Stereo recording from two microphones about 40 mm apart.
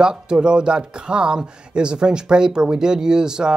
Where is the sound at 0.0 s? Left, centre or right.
Right.